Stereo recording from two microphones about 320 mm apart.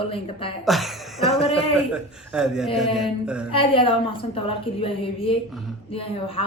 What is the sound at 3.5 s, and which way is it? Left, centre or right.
A man's voice, centre.